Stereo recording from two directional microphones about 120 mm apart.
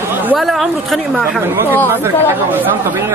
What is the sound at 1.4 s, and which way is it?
Speech, 20° right (ahead or behind).